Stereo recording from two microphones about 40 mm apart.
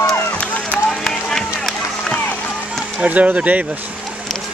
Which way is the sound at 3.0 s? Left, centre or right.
Right.